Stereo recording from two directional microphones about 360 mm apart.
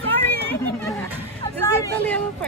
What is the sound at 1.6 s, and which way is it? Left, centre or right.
Hubbub, centre.